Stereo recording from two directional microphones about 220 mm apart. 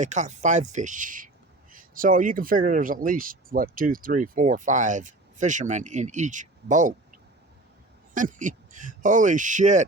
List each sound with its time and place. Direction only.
0.0 s speech: 35° right (ahead or behind)
8.1 s speech: 35° right (ahead or behind)